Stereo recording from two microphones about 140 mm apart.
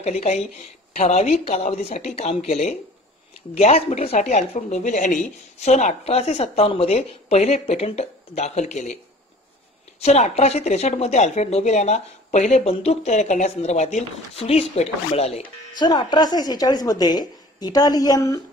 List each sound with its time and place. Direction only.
0.0 s speech: 50° left (ahead or behind)
9.9 s speech: 50° left (ahead or behind)
15.8 s a woman's voice: 30° left (ahead or behind)